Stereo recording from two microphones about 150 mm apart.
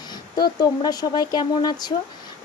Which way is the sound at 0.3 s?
30° left (ahead or behind).